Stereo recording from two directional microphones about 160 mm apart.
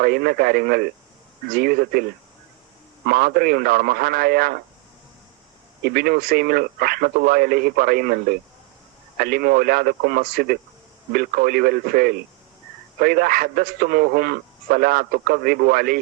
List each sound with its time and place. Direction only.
0.0 s a man's voice: 70° right (ahead or behind)
3.1 s a man's voice: 70° right (ahead or behind)
5.8 s a man's voice: 70° right (ahead or behind)